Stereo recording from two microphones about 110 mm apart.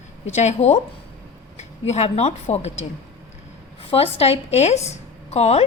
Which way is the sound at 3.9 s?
65° left (ahead or behind).